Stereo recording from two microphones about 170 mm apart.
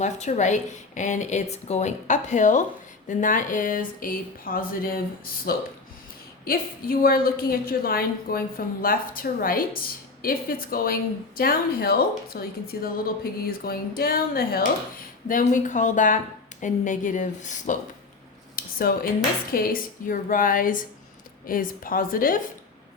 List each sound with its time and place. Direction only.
0.0 s a woman's voice: 45° left (ahead or behind); by 14.7 s 60° left (ahead or behind)
15.3 s a woman's voice: 50° left (ahead or behind)
18.5 s cutlery: 60° left (ahead or behind)
19.5 s a woman's voice: 60° left (ahead or behind)